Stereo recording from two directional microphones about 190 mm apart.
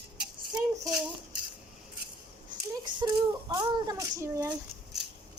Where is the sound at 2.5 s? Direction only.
25° right (ahead or behind).